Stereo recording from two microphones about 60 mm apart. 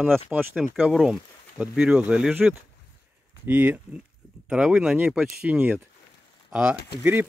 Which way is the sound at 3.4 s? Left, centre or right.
Right.